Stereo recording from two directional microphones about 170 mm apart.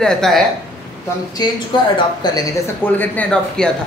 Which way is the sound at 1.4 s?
25° left (ahead or behind).